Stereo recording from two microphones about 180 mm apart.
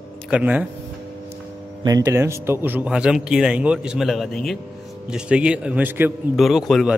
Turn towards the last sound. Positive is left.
turn(degrees=0)  # may be behind; listen again after turning